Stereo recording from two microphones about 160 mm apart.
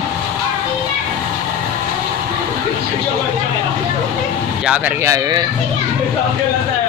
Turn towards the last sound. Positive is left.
turn(degrees=-25)  # may be behind; listen again after turning